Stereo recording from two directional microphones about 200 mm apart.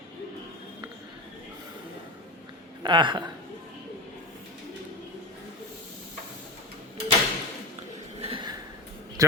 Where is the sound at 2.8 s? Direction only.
25° right (ahead or behind).